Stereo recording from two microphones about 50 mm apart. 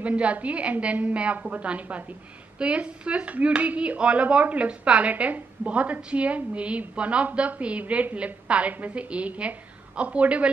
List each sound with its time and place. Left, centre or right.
0.0 s speech: right